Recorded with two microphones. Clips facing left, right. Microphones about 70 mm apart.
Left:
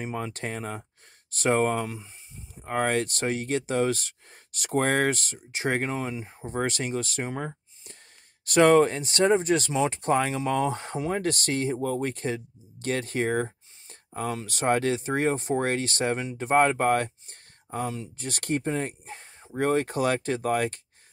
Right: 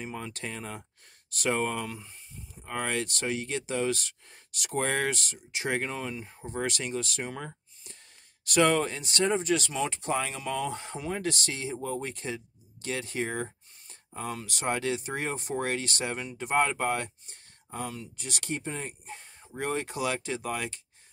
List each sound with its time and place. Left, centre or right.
0.0 s speech: left
12.8 s a sound: left
14.4 s speech: left